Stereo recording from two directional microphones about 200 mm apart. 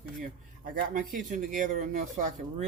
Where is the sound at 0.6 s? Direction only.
45° right (ahead or behind).